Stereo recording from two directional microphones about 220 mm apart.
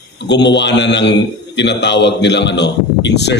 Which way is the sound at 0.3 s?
50° left (ahead or behind).